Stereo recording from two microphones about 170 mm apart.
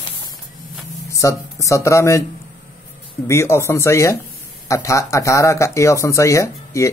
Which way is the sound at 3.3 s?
15° left (ahead or behind).